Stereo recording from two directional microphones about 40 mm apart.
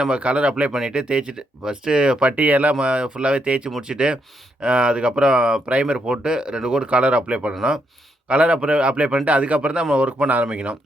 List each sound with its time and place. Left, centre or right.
0.1 s speech: right
0.7 s speech: centre
2.3 s speech: right
2.7 s speech: right
3.7 s speech: centre
6.8 s speech: right
9.2 s speech: right